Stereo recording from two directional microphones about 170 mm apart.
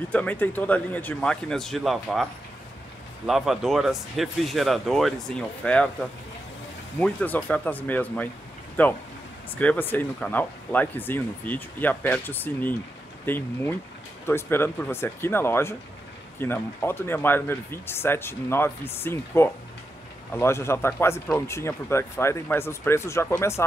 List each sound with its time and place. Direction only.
0.1 s speech: 10° left (ahead or behind)
3.3 s speech: centre (ahead or behind)
7.0 s speech: 10° left (ahead or behind)